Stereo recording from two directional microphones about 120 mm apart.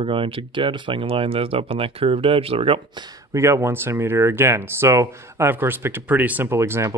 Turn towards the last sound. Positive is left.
turn(degrees=-20)  # may be behind; listen again after turning